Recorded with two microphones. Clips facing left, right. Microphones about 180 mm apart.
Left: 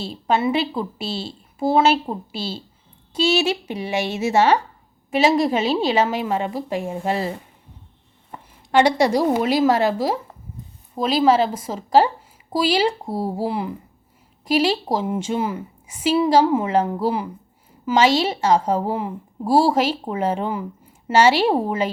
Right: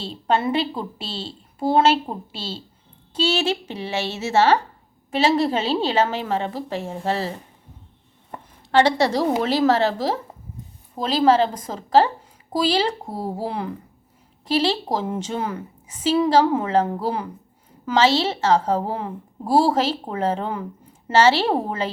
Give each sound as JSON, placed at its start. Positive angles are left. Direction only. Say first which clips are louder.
{"t": 0.0, "sound": "a woman's voice", "louder": "left 1 dB", "side_deg": 10}
{"t": 8.7, "sound": "a woman's voice", "louder": "left 1 dB", "side_deg": 15}